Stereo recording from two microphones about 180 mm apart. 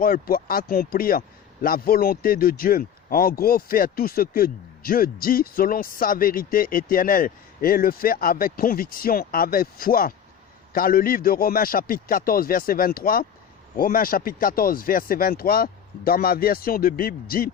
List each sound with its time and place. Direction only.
0.0 s a man's voice: 55° left (ahead or behind)